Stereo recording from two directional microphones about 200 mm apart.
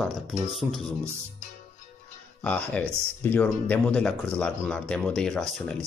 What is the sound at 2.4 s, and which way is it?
Speech, 5° left (ahead or behind).